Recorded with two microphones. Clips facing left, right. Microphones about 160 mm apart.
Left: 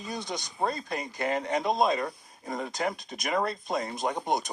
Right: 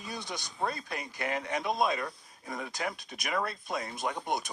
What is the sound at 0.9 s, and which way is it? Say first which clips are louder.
Speech: left 5 dB; 50° left (ahead or behind).